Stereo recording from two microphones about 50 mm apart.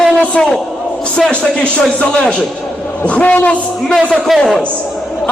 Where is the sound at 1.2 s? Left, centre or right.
Left.